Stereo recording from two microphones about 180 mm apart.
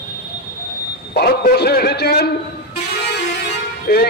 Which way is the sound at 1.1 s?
60° left (ahead or behind).